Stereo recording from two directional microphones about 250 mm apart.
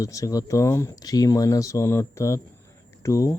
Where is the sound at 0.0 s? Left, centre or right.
Centre.